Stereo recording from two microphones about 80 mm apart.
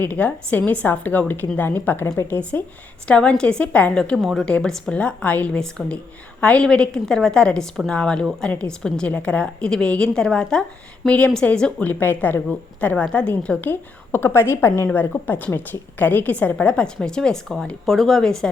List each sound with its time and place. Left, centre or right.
0.0 s a woman's voice: centre
5.6 s a woman's voice: centre
11.9 s a woman's voice: left
13.7 s a woman's voice: left
15.3 s a woman's voice: left